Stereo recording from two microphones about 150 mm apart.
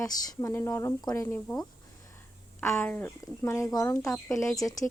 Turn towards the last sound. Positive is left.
turn(degrees=25)  # may be behind; listen again after turning